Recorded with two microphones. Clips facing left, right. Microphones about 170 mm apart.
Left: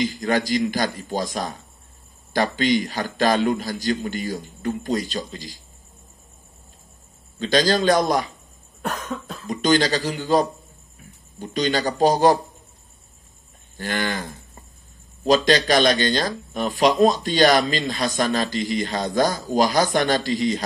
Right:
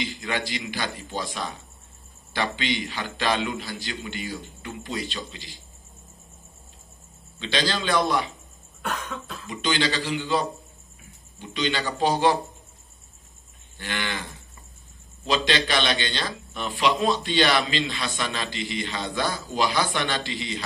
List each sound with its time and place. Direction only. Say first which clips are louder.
0.0 s speech: left 8 dB; 40° left (ahead or behind)
7.3 s speech: left 8 dB; 45° left (ahead or behind)
13.7 s speech: left 6 dB; 40° left (ahead or behind)